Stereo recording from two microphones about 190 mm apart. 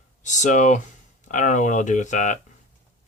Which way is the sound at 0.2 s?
40° left (ahead or behind).